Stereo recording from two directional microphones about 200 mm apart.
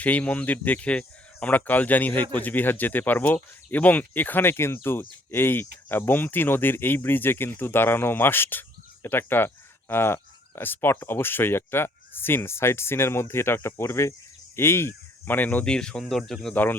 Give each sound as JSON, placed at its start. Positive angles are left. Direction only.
{"t": 0.0, "sound": "speech", "side_deg": 10}